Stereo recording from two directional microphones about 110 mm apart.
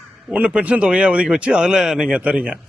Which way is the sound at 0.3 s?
10° right (ahead or behind).